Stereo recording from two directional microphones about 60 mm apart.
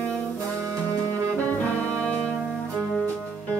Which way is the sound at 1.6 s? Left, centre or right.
Left.